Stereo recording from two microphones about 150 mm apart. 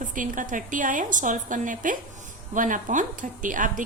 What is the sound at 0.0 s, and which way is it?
A woman's voice, 60° right (ahead or behind).